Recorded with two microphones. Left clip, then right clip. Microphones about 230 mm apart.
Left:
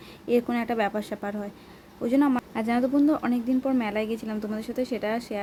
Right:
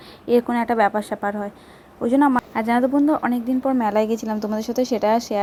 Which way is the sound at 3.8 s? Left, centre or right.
Right.